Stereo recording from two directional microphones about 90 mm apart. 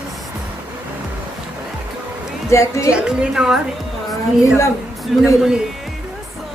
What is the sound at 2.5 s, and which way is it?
Speech, 35° left (ahead or behind).